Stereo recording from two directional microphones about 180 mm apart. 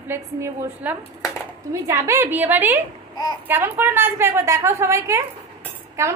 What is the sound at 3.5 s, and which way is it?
A woman's voice, 10° right (ahead or behind).